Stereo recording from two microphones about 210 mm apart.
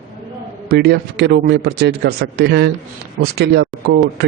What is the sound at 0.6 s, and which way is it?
A man's voice, 50° right (ahead or behind).